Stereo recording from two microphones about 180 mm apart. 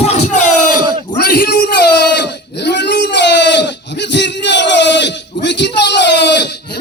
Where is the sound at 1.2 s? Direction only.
60° left (ahead or behind).